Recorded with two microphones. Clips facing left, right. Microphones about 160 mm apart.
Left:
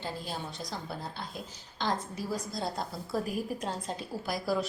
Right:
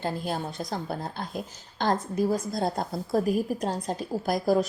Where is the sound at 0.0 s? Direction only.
50° right (ahead or behind).